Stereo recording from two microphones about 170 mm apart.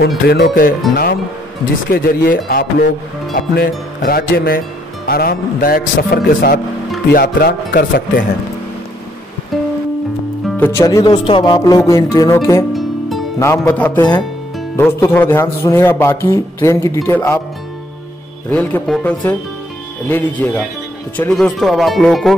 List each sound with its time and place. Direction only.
0.3 s speech: 60° left (ahead or behind)
1.9 s speech: 60° left (ahead or behind)
10.6 s a man's voice: 15° left (ahead or behind)
11.2 s a man's voice: 30° left (ahead or behind)
18.5 s a man's voice: 10° left (ahead or behind)